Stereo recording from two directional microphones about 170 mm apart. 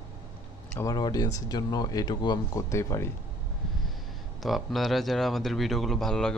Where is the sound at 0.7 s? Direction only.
15° left (ahead or behind).